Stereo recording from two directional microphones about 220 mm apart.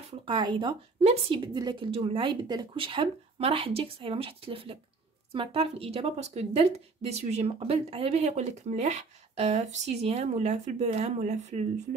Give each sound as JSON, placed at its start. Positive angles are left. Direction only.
{"t": 0.2, "sound": "a woman's voice", "side_deg": -20}